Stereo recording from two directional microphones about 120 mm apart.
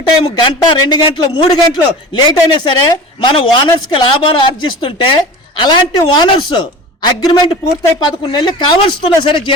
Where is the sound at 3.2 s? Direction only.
45° left (ahead or behind).